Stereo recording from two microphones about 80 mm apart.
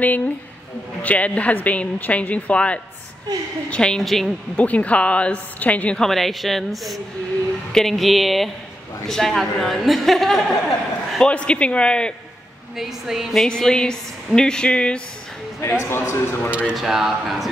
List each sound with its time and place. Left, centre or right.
1.0 s a woman's voice: centre
4.6 s speech: centre
5.9 s a woman's voice: centre
12.7 s a woman's voice: centre
13.5 s speech: centre
15.6 s a man's voice: left
16.4 s speech: centre
16.7 s a woman's voice: centre